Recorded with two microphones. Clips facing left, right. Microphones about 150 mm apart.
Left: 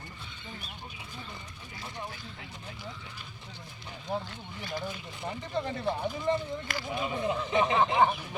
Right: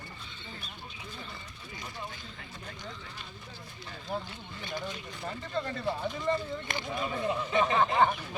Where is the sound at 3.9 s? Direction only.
15° left (ahead or behind).